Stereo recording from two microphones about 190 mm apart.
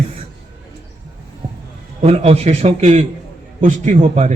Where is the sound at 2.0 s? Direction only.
30° right (ahead or behind).